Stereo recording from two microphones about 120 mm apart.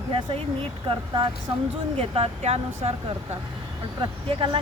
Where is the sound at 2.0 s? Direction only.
55° right (ahead or behind).